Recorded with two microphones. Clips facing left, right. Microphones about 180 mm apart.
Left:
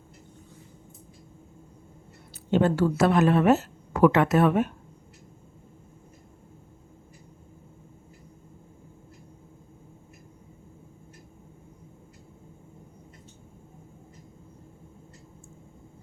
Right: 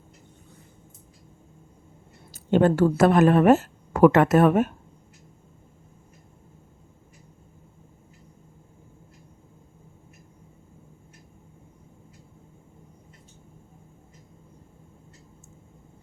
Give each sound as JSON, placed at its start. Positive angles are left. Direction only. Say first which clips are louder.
{"t": 2.3, "sound": "a woman's voice", "louder": "right 3 dB", "side_deg": -50}